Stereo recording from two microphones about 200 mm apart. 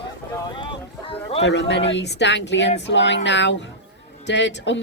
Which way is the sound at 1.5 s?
60° left (ahead or behind).